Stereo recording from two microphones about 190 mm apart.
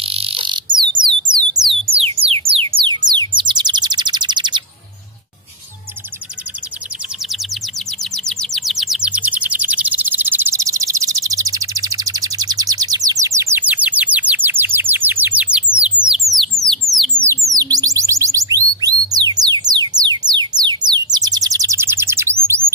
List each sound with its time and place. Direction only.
0.0 s a sound: 30° right (ahead or behind)
1.9 s music: 30° right (ahead or behind)
3.1 s bird: 25° right (ahead or behind)
8.0 s chirp: centre (ahead or behind)
15.7 s a sound: 5° right (ahead or behind)
17.6 s music: 20° right (ahead or behind)